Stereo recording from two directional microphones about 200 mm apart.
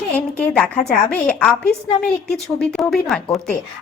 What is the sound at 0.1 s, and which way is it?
A woman's voice, 5° left (ahead or behind).